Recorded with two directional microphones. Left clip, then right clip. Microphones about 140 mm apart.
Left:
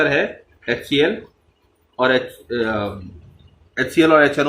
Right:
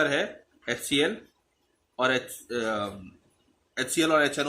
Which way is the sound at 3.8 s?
25° right (ahead or behind).